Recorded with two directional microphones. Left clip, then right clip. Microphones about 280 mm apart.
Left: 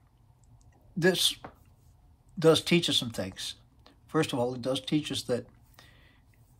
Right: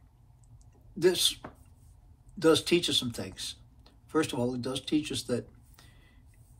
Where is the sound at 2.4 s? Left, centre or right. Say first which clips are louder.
Left 1 dB; left.